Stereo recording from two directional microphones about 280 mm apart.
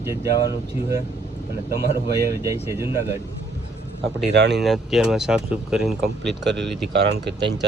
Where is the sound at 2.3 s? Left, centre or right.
Centre.